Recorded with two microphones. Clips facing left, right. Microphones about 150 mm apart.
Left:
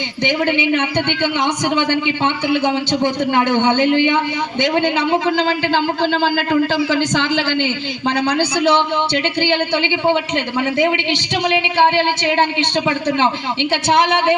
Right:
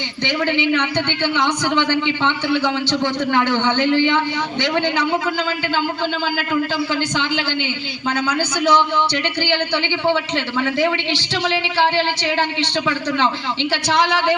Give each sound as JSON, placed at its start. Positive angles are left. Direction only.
{"t": 0.3, "sound": "speech", "side_deg": 20}
{"t": 8.0, "sound": "speech", "side_deg": 35}